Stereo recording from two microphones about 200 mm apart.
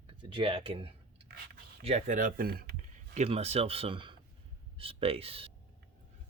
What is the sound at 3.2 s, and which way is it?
Speech, 30° right (ahead or behind).